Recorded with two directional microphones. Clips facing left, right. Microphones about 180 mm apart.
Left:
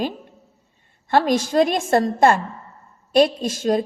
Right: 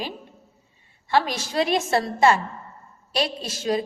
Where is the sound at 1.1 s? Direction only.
50° left (ahead or behind).